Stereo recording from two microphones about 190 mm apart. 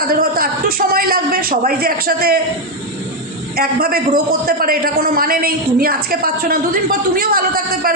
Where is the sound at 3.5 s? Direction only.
55° right (ahead or behind).